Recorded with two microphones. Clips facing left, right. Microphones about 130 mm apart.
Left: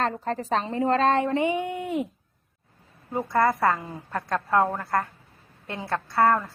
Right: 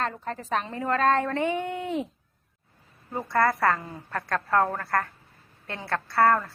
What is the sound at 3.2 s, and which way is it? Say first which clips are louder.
A woman's voice: left 1 dB; 15° left (ahead or behind).